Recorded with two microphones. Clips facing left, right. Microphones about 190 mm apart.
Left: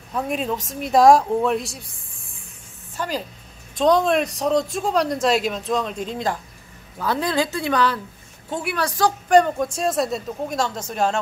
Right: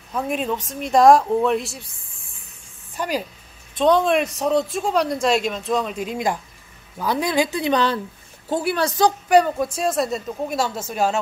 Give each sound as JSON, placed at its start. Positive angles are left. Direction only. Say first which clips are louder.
{"t": 0.1, "sound": "speech", "louder": "right 1 dB", "side_deg": 0}
{"t": 3.0, "sound": "a woman's voice", "louder": "right 2 dB", "side_deg": -10}
{"t": 3.7, "sound": "a woman's voice", "louder": "even", "side_deg": 0}
{"t": 8.5, "sound": "a woman's voice", "louder": "right 4 dB", "side_deg": -35}
{"t": 9.3, "sound": "speech", "louder": "left 3 dB", "side_deg": -5}